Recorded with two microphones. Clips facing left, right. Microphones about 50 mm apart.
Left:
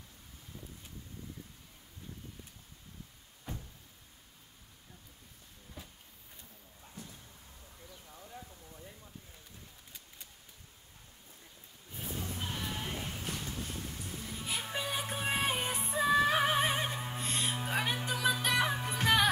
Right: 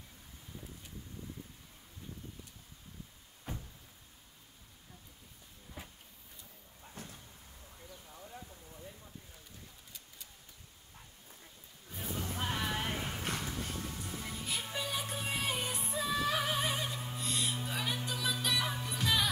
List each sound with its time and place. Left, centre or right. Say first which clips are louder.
7.0 s a sound: right 1 dB; right
8.1 s clip-clop: left 1 dB; centre
12.1 s music: right 2 dB; right
12.4 s a sound: right 6 dB; right
12.9 s clip-clop: right 2 dB; right
13.7 s music: right 1 dB; right
14.4 s music: left 3 dB; centre; by 19.2 s left